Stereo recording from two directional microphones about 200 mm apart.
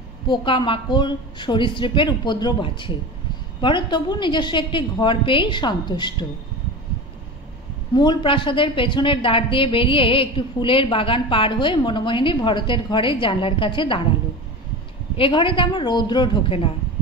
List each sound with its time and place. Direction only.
0.3 s a woman's voice: 25° left (ahead or behind)
7.9 s a woman's voice: 25° left (ahead or behind)
15.1 s a woman's voice: 25° left (ahead or behind)